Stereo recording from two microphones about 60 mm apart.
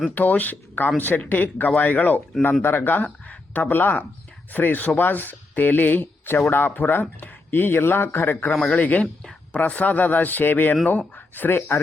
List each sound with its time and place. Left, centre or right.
0.1 s a man's voice: left
8.5 s a man's voice: left